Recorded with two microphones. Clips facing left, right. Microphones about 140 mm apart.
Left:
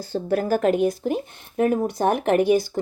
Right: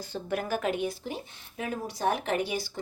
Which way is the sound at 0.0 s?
35° left (ahead or behind).